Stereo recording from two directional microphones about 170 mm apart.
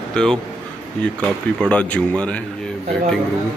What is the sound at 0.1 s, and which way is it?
Speech, 5° left (ahead or behind).